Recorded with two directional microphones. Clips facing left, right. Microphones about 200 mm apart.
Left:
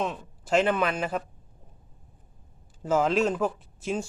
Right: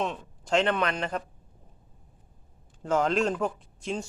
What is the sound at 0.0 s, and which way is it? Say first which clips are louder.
Speech: left 1 dB; 5° left (ahead or behind).